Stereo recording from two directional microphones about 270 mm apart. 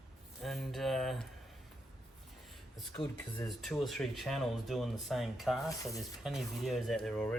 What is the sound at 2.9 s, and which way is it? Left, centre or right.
Speech, centre.